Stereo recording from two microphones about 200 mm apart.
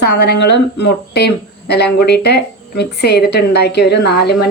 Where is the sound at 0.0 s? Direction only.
55° left (ahead or behind).